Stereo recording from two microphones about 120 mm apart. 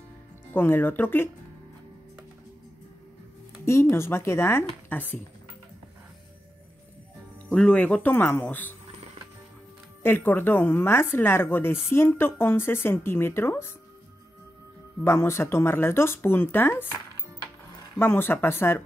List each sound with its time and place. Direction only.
0.5 s speech: 20° left (ahead or behind)
3.9 s speech: 20° left (ahead or behind)
7.5 s speech: 10° left (ahead or behind)
10.0 s speech: 15° left (ahead or behind)
15.0 s speech: 20° left (ahead or behind)
17.9 s speech: 15° left (ahead or behind)